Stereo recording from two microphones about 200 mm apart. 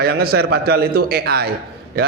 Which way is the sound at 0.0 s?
50° right (ahead or behind).